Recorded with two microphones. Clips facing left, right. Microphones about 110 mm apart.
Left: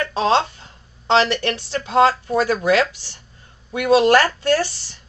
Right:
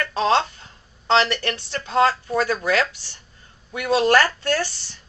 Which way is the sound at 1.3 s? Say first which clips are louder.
Left 4 dB; 25° left (ahead or behind).